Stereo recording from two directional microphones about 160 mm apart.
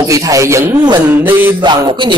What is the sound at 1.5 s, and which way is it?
Speech, 30° right (ahead or behind).